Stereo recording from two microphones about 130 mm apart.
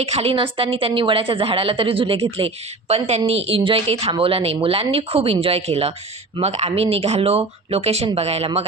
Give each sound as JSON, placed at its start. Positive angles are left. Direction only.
{"t": 0.0, "sound": "a woman's voice", "side_deg": -50}